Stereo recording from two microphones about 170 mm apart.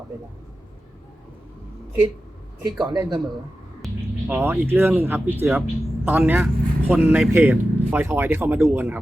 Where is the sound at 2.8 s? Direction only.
25° right (ahead or behind).